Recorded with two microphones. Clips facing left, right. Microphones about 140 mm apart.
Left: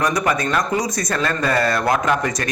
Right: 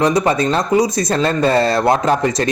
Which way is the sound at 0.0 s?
25° right (ahead or behind).